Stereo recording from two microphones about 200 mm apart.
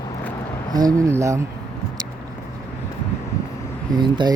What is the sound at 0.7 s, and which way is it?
Speech, 15° right (ahead or behind).